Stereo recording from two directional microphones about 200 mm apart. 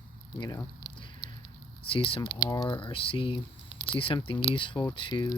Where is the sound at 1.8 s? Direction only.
25° left (ahead or behind).